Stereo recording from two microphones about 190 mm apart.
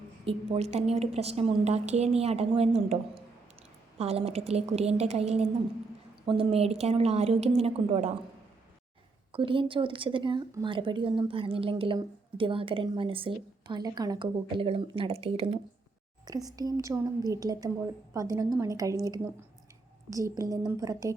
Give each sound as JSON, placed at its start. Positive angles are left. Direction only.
{"t": 0.3, "sound": "a woman's voice", "side_deg": -35}
{"t": 9.3, "sound": "speech", "side_deg": -30}
{"t": 16.2, "sound": "a woman's voice", "side_deg": -20}